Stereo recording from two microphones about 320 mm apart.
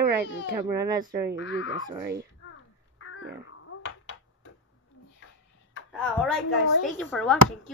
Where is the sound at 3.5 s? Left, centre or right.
Left.